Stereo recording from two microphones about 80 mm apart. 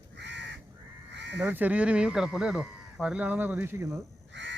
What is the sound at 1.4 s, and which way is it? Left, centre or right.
Speech, right.